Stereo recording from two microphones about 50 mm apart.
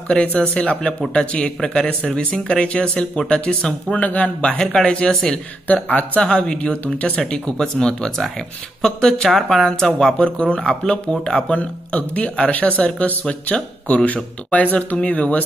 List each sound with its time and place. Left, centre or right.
0.1 s speech: left
5.1 s speech: centre
5.7 s speech: left
6.3 s speech: centre
6.7 s speech: left